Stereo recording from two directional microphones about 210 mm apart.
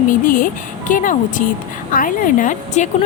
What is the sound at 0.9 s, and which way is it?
Speech, 40° left (ahead or behind).